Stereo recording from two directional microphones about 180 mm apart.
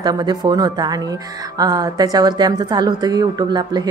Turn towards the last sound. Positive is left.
turn(degrees=-20)  # may be behind; listen again after turning